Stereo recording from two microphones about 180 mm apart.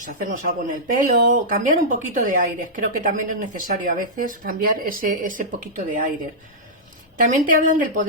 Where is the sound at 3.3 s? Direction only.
50° right (ahead or behind).